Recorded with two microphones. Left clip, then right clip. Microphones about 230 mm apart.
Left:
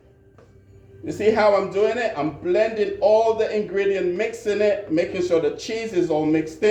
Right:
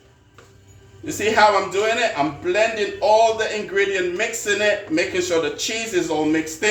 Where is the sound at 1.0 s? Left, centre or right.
Centre.